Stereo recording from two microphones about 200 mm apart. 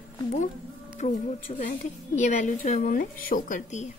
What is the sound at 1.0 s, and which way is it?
A woman's voice, 35° left (ahead or behind).